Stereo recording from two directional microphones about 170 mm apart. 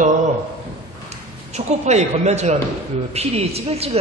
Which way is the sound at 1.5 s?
40° right (ahead or behind).